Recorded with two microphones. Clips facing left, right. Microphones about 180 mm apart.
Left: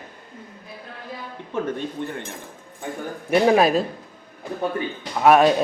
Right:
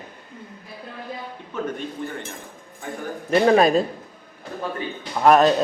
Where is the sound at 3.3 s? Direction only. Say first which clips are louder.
Right 1 dB; 5° left (ahead or behind).